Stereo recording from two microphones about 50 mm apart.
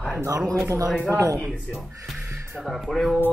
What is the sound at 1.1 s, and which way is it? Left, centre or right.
Speech, right.